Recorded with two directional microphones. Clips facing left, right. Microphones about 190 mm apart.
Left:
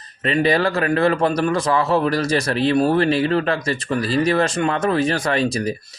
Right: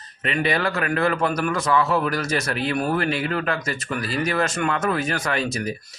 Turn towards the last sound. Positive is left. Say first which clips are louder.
# left 5 dB
turn(degrees=35)  # may be behind; listen again after turning